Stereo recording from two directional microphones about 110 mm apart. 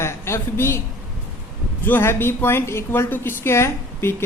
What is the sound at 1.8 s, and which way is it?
Speech, 20° left (ahead or behind).